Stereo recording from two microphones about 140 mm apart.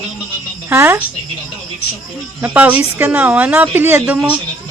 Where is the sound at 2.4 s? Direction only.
10° right (ahead or behind).